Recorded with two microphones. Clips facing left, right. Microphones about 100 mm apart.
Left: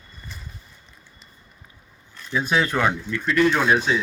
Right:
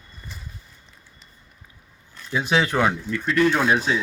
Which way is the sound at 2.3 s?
15° right (ahead or behind).